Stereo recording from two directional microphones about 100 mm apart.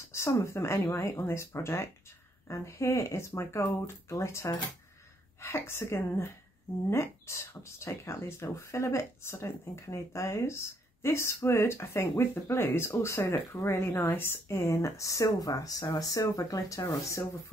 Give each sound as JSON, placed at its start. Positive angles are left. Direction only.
{"t": 0.1, "sound": "speech", "side_deg": 30}